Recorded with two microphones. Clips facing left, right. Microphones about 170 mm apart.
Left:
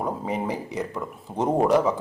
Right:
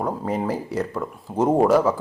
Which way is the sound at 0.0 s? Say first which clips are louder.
Right 3 dB; 15° left (ahead or behind).